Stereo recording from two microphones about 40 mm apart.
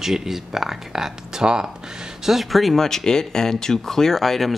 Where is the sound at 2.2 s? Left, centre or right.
Centre.